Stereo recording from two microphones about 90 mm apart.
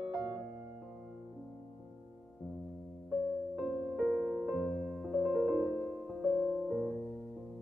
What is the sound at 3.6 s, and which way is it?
Music, centre (ahead or behind).